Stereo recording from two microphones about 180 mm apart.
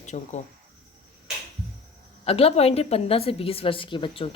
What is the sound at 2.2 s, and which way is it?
A woman's voice, 35° left (ahead or behind).